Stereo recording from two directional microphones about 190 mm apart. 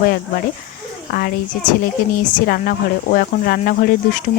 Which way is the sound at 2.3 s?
50° left (ahead or behind).